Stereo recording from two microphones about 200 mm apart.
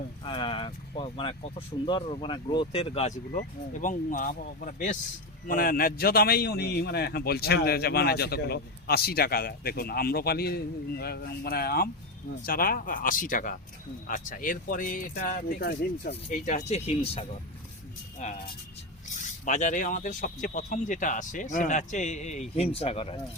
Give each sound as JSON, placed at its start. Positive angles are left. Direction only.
{"t": 0.3, "sound": "a man's voice", "side_deg": 25}